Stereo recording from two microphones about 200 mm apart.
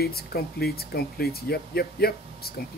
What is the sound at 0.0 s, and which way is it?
Speech, 50° left (ahead or behind).